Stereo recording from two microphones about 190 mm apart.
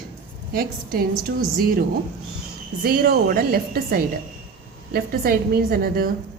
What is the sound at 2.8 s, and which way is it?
Speech, 50° right (ahead or behind).